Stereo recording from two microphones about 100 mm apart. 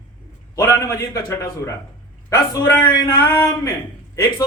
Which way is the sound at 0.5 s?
30° left (ahead or behind).